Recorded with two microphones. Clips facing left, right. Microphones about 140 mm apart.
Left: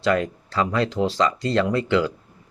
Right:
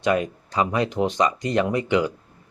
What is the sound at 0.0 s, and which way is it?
Speech, 20° right (ahead or behind).